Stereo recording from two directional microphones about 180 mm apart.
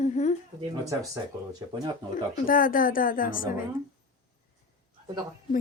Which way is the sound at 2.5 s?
50° left (ahead or behind).